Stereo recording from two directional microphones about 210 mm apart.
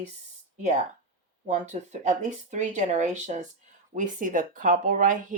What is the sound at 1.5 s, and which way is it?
Speech, 35° right (ahead or behind).